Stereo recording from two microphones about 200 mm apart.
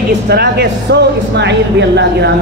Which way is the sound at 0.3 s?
50° right (ahead or behind).